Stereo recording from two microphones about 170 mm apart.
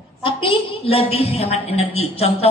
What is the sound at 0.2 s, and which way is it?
A woman's voice, 35° left (ahead or behind).